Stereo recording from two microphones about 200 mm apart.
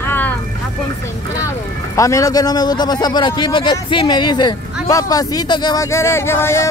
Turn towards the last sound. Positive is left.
turn(degrees=10)  # may be behind; listen again after turning